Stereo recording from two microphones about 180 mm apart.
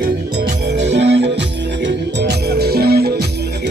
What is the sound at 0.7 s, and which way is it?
Music, 75° right (ahead or behind).